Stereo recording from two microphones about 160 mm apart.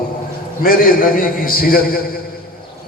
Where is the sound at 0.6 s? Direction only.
65° left (ahead or behind).